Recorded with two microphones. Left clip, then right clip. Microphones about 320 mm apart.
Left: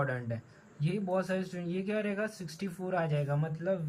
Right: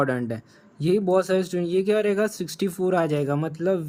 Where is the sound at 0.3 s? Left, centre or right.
Right.